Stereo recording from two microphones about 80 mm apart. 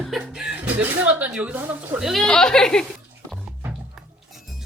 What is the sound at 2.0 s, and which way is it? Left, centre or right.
Speech, centre.